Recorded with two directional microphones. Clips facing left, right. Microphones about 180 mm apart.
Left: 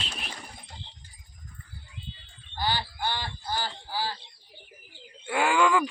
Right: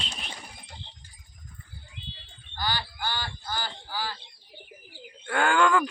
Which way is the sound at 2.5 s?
25° left (ahead or behind).